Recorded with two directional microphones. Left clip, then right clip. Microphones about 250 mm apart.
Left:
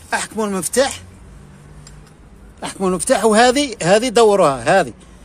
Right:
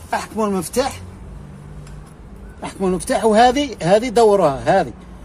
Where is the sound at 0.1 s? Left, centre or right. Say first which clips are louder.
Even; left.